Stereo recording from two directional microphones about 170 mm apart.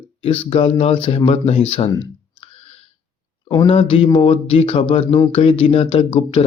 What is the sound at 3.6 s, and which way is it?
Speech, 35° left (ahead or behind).